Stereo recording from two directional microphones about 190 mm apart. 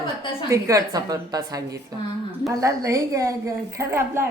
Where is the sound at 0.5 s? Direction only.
15° right (ahead or behind).